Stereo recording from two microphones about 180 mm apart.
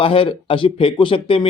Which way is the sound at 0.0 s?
30° left (ahead or behind).